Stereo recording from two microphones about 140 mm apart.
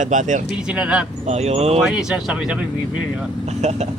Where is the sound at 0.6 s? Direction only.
5° right (ahead or behind).